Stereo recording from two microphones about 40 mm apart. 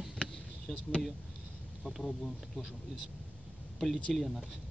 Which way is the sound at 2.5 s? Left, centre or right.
Centre.